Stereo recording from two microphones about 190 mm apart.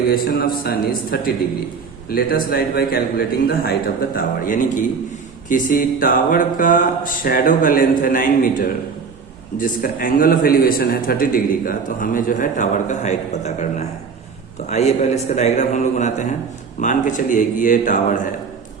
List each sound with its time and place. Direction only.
0.1 s a man's voice: 50° left (ahead or behind)